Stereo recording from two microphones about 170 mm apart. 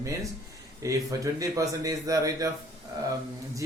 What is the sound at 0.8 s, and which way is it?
A man's voice, 20° right (ahead or behind).